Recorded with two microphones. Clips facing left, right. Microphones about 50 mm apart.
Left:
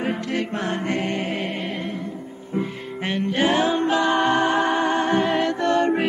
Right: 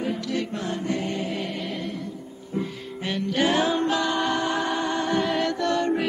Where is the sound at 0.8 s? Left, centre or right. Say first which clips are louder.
Left 3 dB; left.